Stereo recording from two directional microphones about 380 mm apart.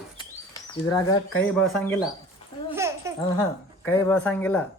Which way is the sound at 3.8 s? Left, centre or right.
Centre.